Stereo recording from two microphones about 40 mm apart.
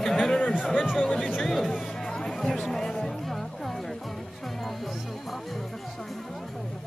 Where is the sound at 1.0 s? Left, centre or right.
Centre.